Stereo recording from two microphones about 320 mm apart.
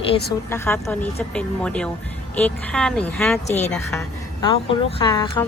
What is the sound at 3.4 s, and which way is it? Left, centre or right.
Speech, left.